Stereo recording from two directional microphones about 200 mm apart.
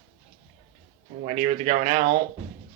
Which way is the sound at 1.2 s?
35° right (ahead or behind).